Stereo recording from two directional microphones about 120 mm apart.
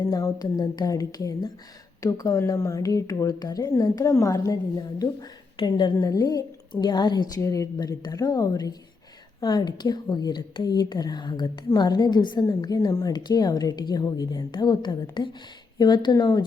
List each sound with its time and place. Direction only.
0.1 s a woman's voice: 30° left (ahead or behind)
5.5 s a woman's voice: 40° left (ahead or behind)